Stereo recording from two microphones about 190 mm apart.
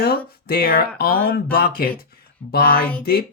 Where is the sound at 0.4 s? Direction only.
55° left (ahead or behind).